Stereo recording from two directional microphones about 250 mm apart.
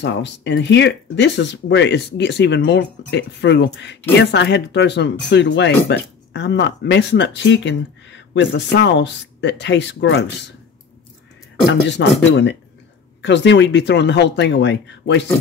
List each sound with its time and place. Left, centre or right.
0.0 s speech: left
12.0 s speech: left
13.2 s speech: left